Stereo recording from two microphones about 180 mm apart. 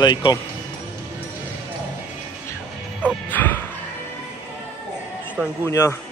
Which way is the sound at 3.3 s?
10° left (ahead or behind).